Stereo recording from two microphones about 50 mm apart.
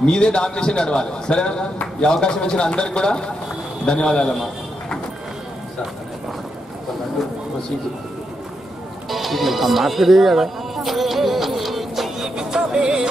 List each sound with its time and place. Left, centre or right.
0.0 s a man's voice: centre
9.1 s music: centre
12.4 s music: centre